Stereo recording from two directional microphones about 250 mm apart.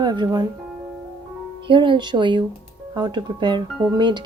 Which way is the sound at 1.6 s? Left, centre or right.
Centre.